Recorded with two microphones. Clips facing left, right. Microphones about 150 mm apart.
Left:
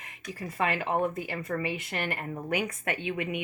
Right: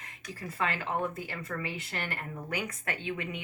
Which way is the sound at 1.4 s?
20° left (ahead or behind).